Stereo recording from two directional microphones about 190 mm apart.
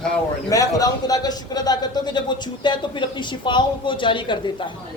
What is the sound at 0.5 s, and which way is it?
A man's voice, 20° left (ahead or behind).